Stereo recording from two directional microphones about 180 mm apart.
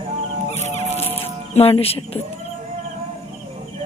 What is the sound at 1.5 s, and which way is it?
Speech, 35° left (ahead or behind).